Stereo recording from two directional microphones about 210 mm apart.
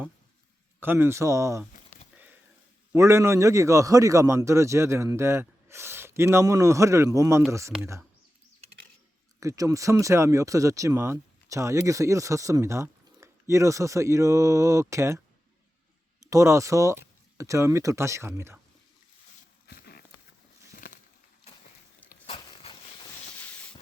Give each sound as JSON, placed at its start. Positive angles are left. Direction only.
{"t": 0.8, "sound": "speech", "side_deg": -10}
{"t": 2.9, "sound": "speech", "side_deg": -15}
{"t": 9.4, "sound": "speech", "side_deg": -15}
{"t": 16.2, "sound": "speech", "side_deg": -15}
{"t": 19.6, "sound": "horse", "side_deg": 50}
{"t": 20.7, "sound": "a sound", "side_deg": 40}
{"t": 22.3, "sound": "a sound", "side_deg": 25}